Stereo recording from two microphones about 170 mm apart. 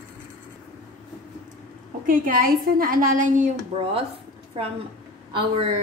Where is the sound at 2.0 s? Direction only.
55° right (ahead or behind).